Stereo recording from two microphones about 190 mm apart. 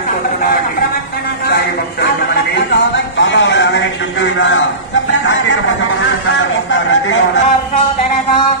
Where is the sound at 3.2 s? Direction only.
70° left (ahead or behind); by 7.2 s 90° left.